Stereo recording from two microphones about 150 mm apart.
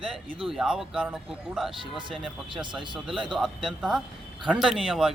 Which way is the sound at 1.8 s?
35° right (ahead or behind).